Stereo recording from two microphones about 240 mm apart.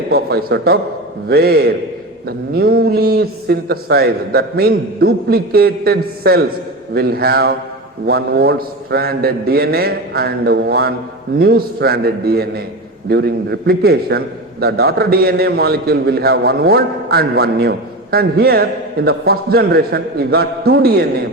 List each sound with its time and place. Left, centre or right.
0.1 s a man's voice: right